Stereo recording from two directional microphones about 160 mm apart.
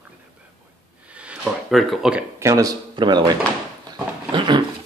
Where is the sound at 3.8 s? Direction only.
30° right (ahead or behind).